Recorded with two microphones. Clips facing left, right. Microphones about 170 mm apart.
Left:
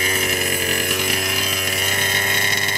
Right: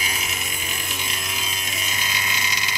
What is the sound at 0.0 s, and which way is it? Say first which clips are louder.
Chainsaw: left 9 dB; 55° left (ahead or behind).